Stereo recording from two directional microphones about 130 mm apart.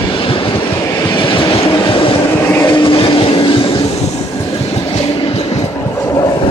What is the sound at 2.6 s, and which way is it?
Train, 35° left (ahead or behind).